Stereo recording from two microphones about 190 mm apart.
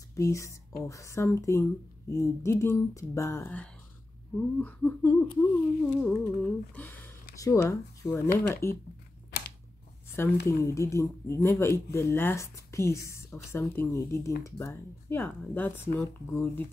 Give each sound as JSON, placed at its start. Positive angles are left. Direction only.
{"t": 0.1, "sound": "speech", "side_deg": 15}
{"t": 9.3, "sound": "scissors", "side_deg": 55}
{"t": 10.4, "sound": "speech", "side_deg": 15}